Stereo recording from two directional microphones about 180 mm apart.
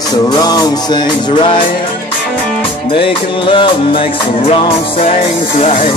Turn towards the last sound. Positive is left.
turn(degrees=30)  # may be behind; listen again after turning